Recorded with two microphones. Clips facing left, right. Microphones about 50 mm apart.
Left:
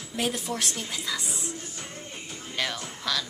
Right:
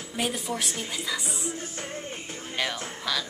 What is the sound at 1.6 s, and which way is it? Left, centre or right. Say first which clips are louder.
Music: right 4 dB; right.